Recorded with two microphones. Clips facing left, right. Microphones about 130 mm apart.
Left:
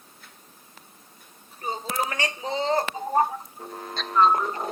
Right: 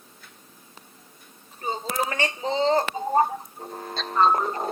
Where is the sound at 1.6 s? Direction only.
35° right (ahead or behind).